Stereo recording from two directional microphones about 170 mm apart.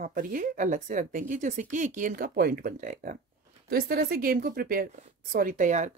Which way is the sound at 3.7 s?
65° right (ahead or behind).